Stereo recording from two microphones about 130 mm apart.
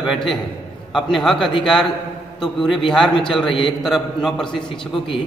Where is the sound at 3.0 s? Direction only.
40° left (ahead or behind).